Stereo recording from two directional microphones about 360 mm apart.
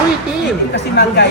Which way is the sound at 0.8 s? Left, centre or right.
Left.